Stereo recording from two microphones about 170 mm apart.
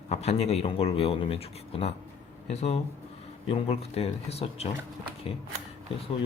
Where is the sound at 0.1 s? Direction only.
40° left (ahead or behind).